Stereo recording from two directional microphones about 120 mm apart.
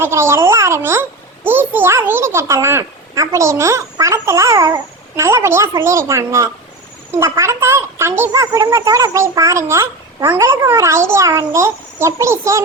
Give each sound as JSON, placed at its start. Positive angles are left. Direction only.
{"t": 0.0, "sound": "a child's voice", "side_deg": -20}